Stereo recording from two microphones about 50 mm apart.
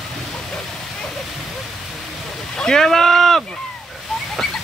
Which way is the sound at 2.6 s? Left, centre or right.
Centre.